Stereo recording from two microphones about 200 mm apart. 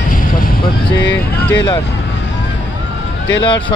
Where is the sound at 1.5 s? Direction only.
20° left (ahead or behind).